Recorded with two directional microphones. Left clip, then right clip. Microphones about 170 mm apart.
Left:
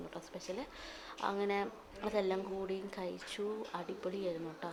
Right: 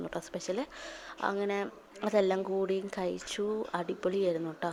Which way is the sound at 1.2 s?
25° right (ahead or behind).